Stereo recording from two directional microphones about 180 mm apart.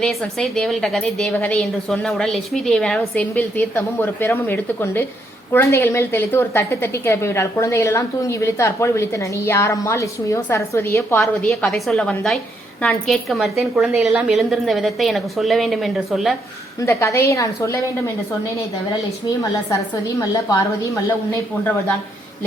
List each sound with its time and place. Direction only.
0.0 s a woman's voice: centre (ahead or behind)
11.2 s a woman's voice: centre (ahead or behind)
16.8 s a woman's voice: 15° left (ahead or behind)
19.7 s a woman's voice: 20° left (ahead or behind)